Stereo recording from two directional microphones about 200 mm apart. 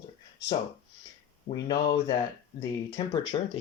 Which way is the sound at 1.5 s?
20° left (ahead or behind).